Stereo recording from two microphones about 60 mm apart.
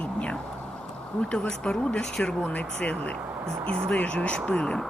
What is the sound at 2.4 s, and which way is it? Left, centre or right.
Speech, left.